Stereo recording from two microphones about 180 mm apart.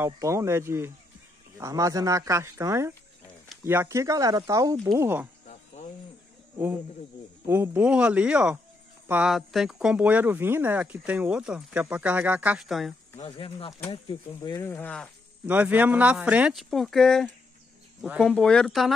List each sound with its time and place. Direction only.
0.0 s speech: 15° right (ahead or behind)
7.4 s speech: 15° right (ahead or behind)
13.2 s speech: 30° left (ahead or behind)
14.7 s speech: 10° left (ahead or behind)
15.4 s speech: 10° right (ahead or behind)